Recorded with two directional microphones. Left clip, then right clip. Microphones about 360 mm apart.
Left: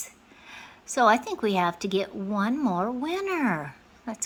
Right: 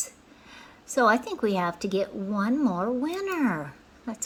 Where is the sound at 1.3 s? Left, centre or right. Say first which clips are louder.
Left 1 dB; centre.